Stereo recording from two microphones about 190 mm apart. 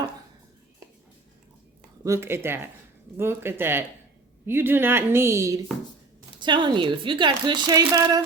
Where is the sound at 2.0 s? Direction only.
15° right (ahead or behind).